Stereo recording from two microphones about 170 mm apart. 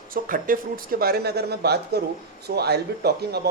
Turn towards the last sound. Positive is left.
turn(degrees=-70)  # may be behind; listen again after turning